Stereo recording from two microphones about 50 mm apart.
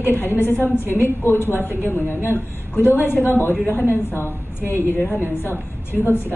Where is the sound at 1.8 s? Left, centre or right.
Left.